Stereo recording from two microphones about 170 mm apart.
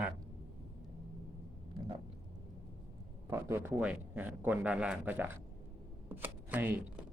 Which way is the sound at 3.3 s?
15° right (ahead or behind).